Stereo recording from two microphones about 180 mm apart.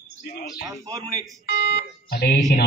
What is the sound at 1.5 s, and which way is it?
Smoke detector, 70° left (ahead or behind).